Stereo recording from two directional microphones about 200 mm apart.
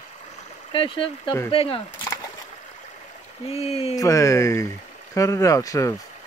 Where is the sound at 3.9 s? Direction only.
15° left (ahead or behind).